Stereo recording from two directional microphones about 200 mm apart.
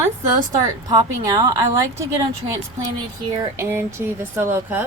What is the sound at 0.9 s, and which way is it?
Speech, 20° right (ahead or behind).